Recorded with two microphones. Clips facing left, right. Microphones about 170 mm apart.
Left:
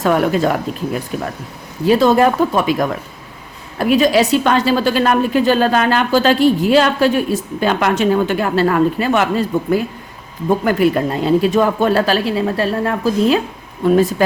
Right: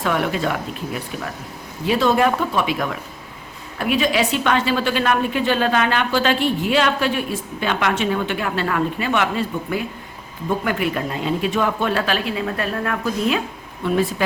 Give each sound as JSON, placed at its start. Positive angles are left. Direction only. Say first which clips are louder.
{"t": 0.0, "sound": "a woman's voice", "louder": "left 6 dB", "side_deg": 40}